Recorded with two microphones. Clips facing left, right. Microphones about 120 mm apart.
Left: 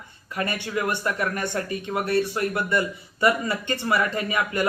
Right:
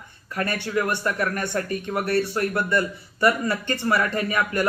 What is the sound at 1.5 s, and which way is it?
Speech, 55° right (ahead or behind).